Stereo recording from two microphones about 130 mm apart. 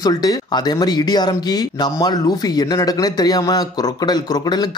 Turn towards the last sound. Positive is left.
turn(degrees=30)  # may be behind; listen again after turning